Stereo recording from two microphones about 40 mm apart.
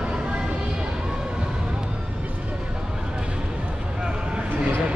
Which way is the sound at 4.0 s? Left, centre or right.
Centre.